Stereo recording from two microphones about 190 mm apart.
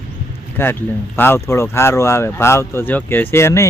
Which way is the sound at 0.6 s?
10° left (ahead or behind).